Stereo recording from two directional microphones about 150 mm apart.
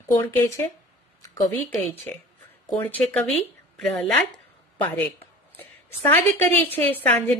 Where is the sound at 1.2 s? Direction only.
25° left (ahead or behind).